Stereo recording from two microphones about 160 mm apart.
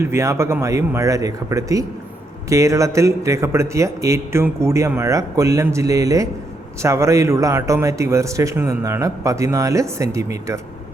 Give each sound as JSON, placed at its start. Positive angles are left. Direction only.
{"t": 0.0, "sound": "speech", "side_deg": -15}